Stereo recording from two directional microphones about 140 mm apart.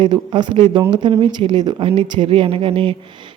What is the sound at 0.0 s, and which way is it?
Speech, 35° right (ahead or behind).